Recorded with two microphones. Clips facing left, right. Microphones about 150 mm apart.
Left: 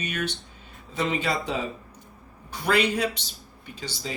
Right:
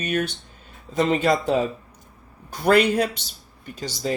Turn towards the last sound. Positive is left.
turn(degrees=-50)  # may be behind; listen again after turning